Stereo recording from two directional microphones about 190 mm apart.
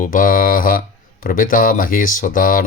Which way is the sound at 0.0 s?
45° left (ahead or behind).